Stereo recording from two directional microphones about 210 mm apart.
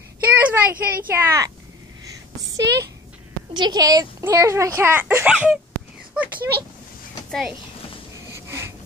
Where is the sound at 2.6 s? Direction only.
55° right (ahead or behind).